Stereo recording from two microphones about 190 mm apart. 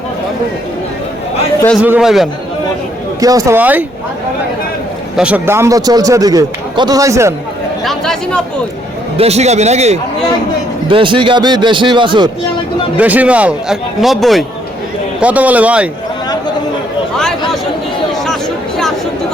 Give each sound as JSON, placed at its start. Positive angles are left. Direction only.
{"t": 1.8, "sound": "a man's voice", "side_deg": -5}
{"t": 3.2, "sound": "speech", "side_deg": -20}
{"t": 5.1, "sound": "speech", "side_deg": -5}
{"t": 7.9, "sound": "a man's voice", "side_deg": 0}
{"t": 9.1, "sound": "speech", "side_deg": -35}
{"t": 10.8, "sound": "a man's voice", "side_deg": -25}
{"t": 13.0, "sound": "a man's voice", "side_deg": -10}
{"t": 17.2, "sound": "chatter", "side_deg": 0}